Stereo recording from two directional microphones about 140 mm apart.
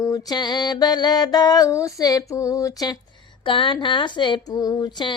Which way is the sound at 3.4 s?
35° left (ahead or behind).